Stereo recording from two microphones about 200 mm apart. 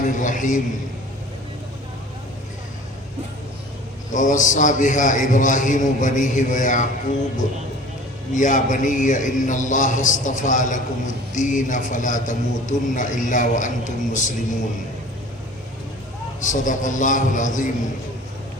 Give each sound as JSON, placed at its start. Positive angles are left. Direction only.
{"t": 0.0, "sound": "a man's voice", "side_deg": 40}
{"t": 4.1, "sound": "a man's voice", "side_deg": 40}
{"t": 8.3, "sound": "a man's voice", "side_deg": 40}
{"t": 16.4, "sound": "a man's voice", "side_deg": 40}